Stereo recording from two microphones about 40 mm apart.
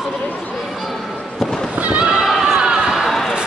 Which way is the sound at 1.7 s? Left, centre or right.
Right.